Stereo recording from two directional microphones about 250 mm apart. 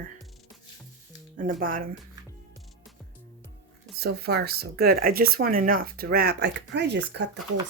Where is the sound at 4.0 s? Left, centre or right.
Right.